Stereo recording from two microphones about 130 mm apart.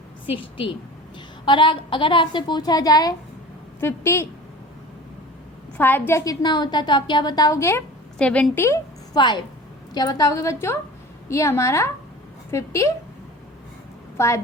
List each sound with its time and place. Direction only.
0.5 s a woman's voice: 40° left (ahead or behind)
3.8 s a woman's voice: 20° left (ahead or behind)
5.7 s a woman's voice: 15° left (ahead or behind)
6.4 s a woman's voice: 35° left (ahead or behind)
8.2 s a woman's voice: 10° left (ahead or behind)
9.1 s a woman's voice: 35° left (ahead or behind)
14.2 s a woman's voice: 20° left (ahead or behind)